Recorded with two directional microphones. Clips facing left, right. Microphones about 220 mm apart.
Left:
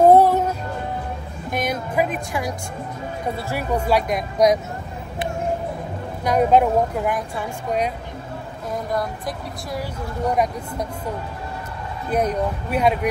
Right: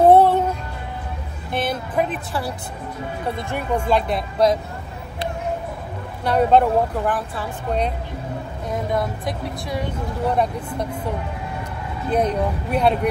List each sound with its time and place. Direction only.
0.1 s music: 10° left (ahead or behind)
1.5 s music: 10° left (ahead or behind)
3.5 s speech: 5° left (ahead or behind)
6.2 s speech: 10° left (ahead or behind)
8.7 s speech: centre (ahead or behind)
10.3 s speech: 10° left (ahead or behind)
12.1 s speech: 10° left (ahead or behind)